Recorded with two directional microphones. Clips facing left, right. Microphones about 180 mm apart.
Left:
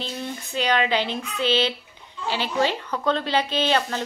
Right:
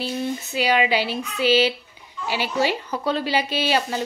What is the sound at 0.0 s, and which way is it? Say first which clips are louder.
A woman's voice: right 5 dB; 10° right (ahead or behind).